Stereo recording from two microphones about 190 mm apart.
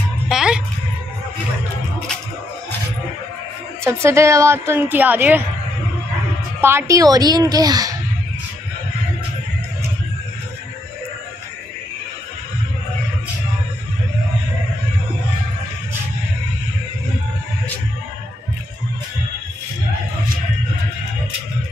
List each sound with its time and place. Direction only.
0.3 s music: 5° right (ahead or behind)
3.8 s a woman's voice: 15° right (ahead or behind)
6.6 s speech: 15° right (ahead or behind)